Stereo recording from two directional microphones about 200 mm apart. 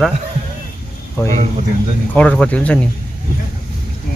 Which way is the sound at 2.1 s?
5° left (ahead or behind).